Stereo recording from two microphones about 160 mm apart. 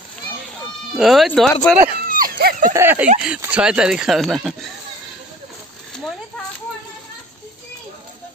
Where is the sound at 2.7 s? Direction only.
15° right (ahead or behind).